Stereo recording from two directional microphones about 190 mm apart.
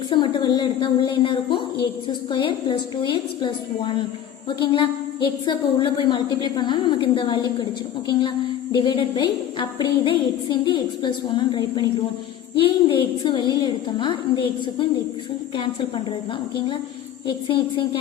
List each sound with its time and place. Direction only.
0.1 s a woman's voice: 25° left (ahead or behind)
8.7 s a woman's voice: 25° left (ahead or behind)
17.2 s a woman's voice: 25° left (ahead or behind)